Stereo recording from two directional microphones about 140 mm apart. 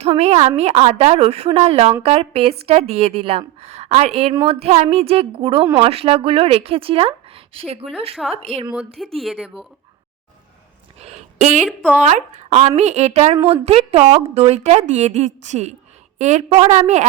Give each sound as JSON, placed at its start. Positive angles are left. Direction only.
{"t": 0.0, "sound": "a woman's voice", "side_deg": -50}
{"t": 8.1, "sound": "speech", "side_deg": 0}
{"t": 8.4, "sound": "a woman's voice", "side_deg": -45}
{"t": 9.1, "sound": "speech", "side_deg": 0}
{"t": 11.0, "sound": "a sound", "side_deg": -55}
{"t": 12.0, "sound": "a woman's voice", "side_deg": -55}
{"t": 16.5, "sound": "a woman's voice", "side_deg": -45}
{"t": 16.7, "sound": "a woman's voice", "side_deg": -55}